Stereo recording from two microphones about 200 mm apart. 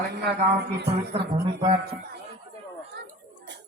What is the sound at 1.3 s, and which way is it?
Speech, 25° right (ahead or behind).